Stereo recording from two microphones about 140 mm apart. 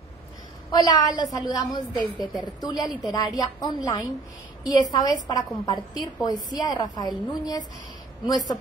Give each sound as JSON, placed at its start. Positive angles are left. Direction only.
{"t": 0.7, "sound": "a woman's voice", "side_deg": 30}